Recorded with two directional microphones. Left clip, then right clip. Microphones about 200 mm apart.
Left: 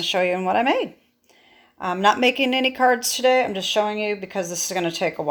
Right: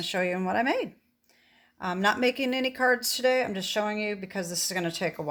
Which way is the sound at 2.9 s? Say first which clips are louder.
Left 5 dB; 90° right.